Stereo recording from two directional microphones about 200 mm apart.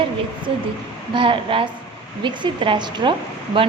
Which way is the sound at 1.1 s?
25° right (ahead or behind).